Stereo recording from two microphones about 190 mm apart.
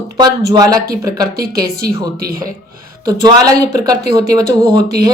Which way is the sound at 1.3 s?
55° right (ahead or behind).